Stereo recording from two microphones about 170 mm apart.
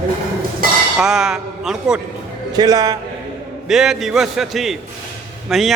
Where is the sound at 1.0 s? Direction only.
Centre (ahead or behind).